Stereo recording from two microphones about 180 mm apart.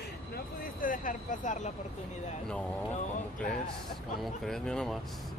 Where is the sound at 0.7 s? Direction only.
50° left (ahead or behind).